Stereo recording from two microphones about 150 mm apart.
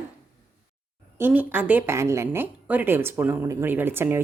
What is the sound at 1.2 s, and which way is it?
Speech, 10° right (ahead or behind).